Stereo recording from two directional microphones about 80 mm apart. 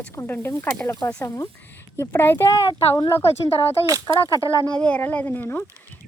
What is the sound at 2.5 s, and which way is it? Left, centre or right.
Speech, left.